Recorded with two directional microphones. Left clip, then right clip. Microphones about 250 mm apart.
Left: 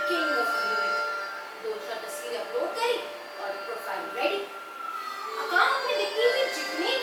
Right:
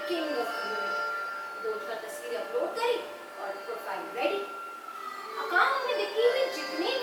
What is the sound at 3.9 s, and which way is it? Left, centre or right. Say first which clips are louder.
Speech: left 2 dB; centre.